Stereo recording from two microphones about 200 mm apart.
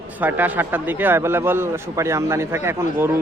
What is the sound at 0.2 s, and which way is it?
Speech, 10° right (ahead or behind).